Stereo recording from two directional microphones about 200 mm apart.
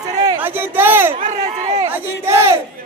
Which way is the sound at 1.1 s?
35° right (ahead or behind).